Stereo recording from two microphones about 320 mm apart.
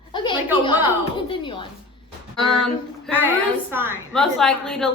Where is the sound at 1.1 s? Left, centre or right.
Centre.